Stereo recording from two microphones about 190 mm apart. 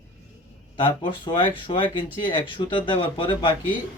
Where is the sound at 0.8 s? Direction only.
25° left (ahead or behind).